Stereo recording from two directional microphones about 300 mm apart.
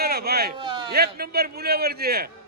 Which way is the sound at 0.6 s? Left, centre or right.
Centre.